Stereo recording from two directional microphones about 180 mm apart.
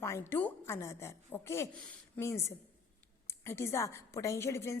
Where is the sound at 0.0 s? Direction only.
15° left (ahead or behind).